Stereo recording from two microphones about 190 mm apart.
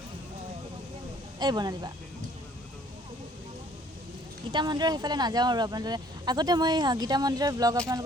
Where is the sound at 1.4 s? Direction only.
20° right (ahead or behind).